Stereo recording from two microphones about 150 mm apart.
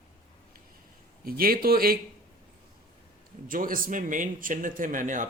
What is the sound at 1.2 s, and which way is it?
Speech, 80° right.